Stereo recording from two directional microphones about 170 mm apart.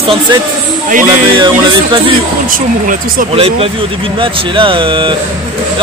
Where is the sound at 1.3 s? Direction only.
25° right (ahead or behind).